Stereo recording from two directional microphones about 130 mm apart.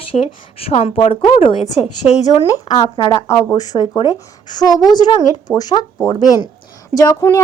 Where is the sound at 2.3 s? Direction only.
35° left (ahead or behind).